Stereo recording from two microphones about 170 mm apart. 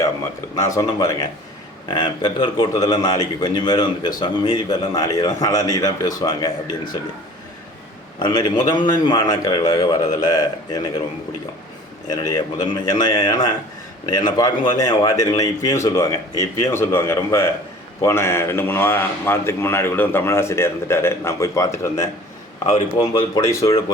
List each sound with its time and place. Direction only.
0.5 s a man's voice: 20° left (ahead or behind)
8.2 s a man's voice: 25° left (ahead or behind)
12.0 s a man's voice: 20° left (ahead or behind)